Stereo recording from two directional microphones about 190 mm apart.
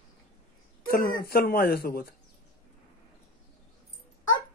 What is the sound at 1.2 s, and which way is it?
Speech, 55° left (ahead or behind).